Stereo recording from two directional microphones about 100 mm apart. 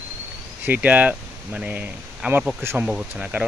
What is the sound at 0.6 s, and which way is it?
Speech, 15° right (ahead or behind).